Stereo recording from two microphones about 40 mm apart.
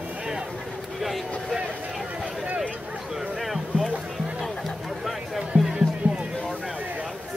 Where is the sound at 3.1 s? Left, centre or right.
Centre.